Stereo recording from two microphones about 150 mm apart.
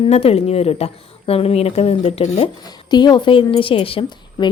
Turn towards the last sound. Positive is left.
turn(degrees=35)  # may be behind; listen again after turning